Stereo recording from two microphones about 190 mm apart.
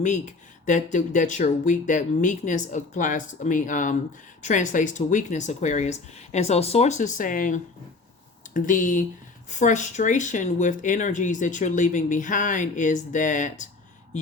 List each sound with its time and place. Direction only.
0.0 s speech: 40° left (ahead or behind)